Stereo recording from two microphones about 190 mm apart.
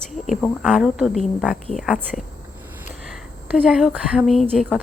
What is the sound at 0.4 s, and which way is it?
Speech, centre (ahead or behind).